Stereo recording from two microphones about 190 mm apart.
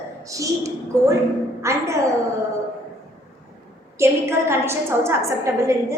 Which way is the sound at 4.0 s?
15° right (ahead or behind).